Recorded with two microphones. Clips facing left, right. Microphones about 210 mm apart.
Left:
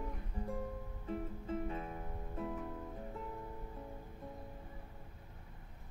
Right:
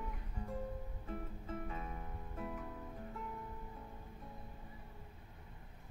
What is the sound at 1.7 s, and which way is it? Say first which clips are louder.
Music: left 3 dB; 30° left (ahead or behind).